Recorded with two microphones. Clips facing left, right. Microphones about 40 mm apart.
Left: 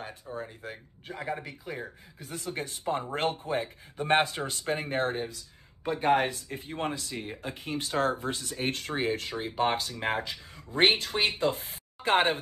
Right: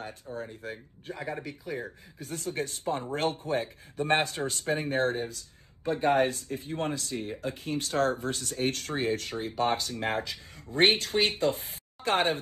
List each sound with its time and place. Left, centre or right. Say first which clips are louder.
0.0 s speech: even; left
1.0 s speech: left 1 dB; left